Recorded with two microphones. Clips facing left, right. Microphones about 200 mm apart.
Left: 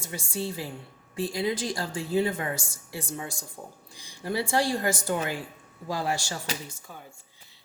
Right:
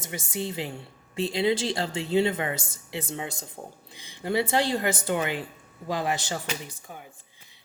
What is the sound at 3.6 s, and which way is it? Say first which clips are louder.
Speech: right 2 dB; 35° right (ahead or behind).